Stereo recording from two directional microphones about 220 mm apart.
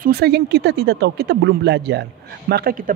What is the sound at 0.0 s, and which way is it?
Speech, 45° right (ahead or behind).